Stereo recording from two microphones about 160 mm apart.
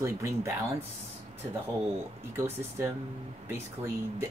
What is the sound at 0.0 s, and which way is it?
Speech, 15° right (ahead or behind).